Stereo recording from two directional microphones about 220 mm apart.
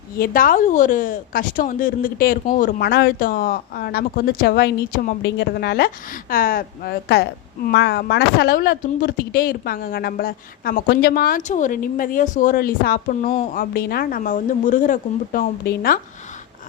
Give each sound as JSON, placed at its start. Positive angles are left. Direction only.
{"t": 0.2, "sound": "a woman's voice", "side_deg": 40}